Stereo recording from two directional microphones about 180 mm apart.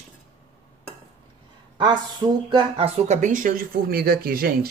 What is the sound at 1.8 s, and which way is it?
Speech, 25° right (ahead or behind).